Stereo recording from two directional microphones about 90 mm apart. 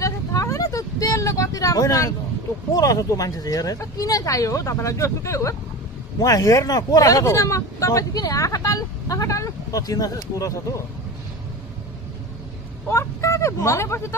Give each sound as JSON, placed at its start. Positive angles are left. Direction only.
{"t": 0.0, "sound": "vehicle", "side_deg": 35}
{"t": 2.7, "sound": "speech", "side_deg": 40}
{"t": 12.9, "sound": "speech", "side_deg": 35}